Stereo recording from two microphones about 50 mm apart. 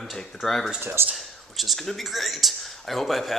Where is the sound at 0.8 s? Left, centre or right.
Right.